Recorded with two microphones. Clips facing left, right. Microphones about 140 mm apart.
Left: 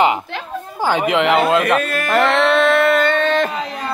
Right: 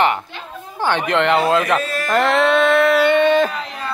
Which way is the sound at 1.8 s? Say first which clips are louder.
Left 2 dB; 55° left (ahead or behind).